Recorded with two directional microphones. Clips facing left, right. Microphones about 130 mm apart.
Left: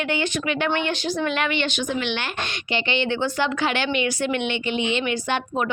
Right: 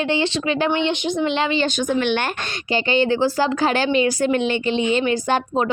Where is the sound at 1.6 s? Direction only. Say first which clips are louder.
Right 5 dB; 45° right (ahead or behind).